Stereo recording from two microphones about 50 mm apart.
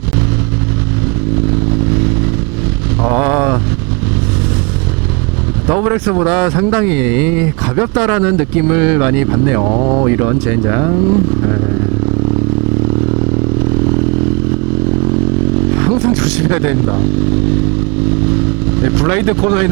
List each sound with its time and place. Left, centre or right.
1.5 s motorcycle: centre
3.0 s a sound: right
5.6 s speech: right
15.5 s vehicle: right
18.1 s motorcycle: centre